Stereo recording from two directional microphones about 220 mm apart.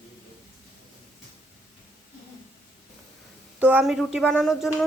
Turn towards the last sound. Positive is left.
turn(degrees=0)  # may be behind; listen again after turning